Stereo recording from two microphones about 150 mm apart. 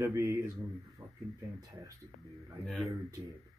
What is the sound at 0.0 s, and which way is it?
Speech, 20° right (ahead or behind).